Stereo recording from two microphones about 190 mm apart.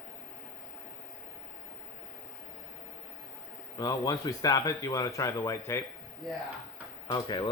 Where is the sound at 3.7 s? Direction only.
20° left (ahead or behind).